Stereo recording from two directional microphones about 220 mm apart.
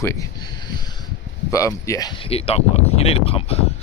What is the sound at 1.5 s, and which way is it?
Speech, 15° left (ahead or behind).